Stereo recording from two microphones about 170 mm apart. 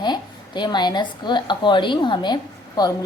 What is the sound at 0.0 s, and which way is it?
A woman's voice, 25° left (ahead or behind).